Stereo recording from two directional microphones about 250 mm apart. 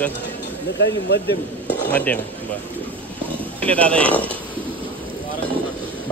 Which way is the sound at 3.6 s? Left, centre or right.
Centre.